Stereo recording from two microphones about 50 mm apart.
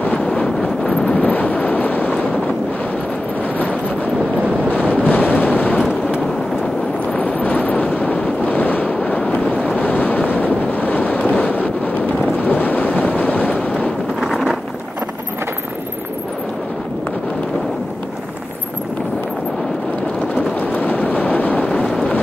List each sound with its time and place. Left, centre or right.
0.3 s wind noise: centre
1.2 s vehicle: left
5.0 s waves: left
7.2 s vehicle: left
7.9 s wind noise: left
9.8 s waves: left
11.3 s a sound: left
12.4 s wind noise: left
13.0 s boat: left
14.2 s a sound: centre
20.3 s vehicle: left